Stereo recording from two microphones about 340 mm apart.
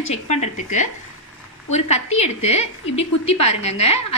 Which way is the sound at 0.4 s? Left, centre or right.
Left.